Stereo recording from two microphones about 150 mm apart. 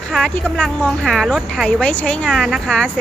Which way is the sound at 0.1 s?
5° left (ahead or behind).